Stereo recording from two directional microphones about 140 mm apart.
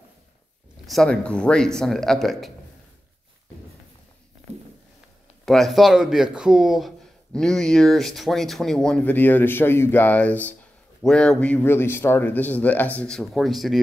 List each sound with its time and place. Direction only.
0.8 s speech: 5° left (ahead or behind)
5.4 s speech: centre (ahead or behind)